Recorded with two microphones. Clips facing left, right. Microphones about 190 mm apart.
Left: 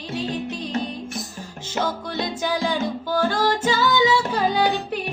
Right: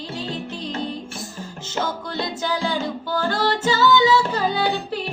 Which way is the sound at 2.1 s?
15° left (ahead or behind).